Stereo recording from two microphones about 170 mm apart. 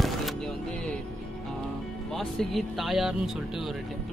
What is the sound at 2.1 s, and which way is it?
Speech, centre (ahead or behind).